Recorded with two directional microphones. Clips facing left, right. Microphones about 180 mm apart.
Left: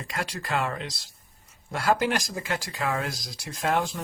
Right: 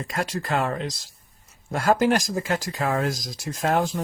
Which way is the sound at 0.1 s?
45° right (ahead or behind).